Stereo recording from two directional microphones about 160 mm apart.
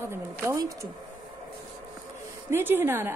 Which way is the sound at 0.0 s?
15° right (ahead or behind).